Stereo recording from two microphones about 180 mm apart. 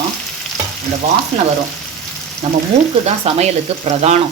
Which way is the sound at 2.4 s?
35° right (ahead or behind).